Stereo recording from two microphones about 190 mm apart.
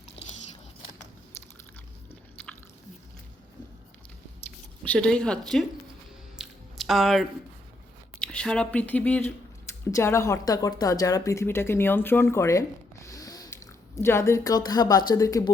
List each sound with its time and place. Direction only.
4.8 s speech: 5° left (ahead or behind)
6.4 s squish: centre (ahead or behind)
8.2 s speech: 5° left (ahead or behind)